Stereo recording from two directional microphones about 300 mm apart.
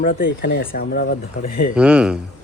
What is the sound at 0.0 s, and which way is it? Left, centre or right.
Speech, left.